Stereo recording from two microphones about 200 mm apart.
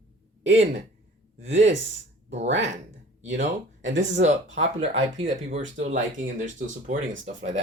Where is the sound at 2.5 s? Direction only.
65° right (ahead or behind).